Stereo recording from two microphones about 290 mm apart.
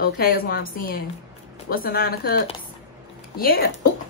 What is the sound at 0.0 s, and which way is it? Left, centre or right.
A woman's voice, left.